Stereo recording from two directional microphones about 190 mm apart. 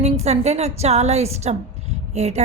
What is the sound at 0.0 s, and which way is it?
A woman's voice, 35° right (ahead or behind).